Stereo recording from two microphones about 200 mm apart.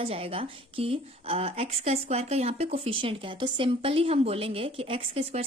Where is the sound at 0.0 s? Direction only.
30° right (ahead or behind).